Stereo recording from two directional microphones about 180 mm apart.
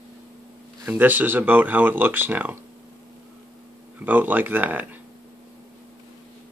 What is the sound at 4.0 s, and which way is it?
Speech, 10° right (ahead or behind).